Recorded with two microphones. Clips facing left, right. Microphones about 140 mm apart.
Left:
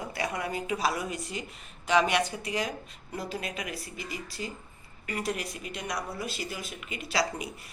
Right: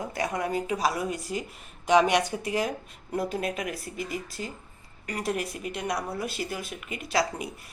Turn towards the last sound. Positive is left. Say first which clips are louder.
# right 3 dB
turn(degrees=-50)  # may be behind; listen again after turning